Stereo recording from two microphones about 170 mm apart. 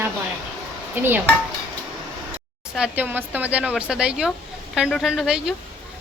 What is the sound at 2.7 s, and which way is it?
Speech, 5° right (ahead or behind).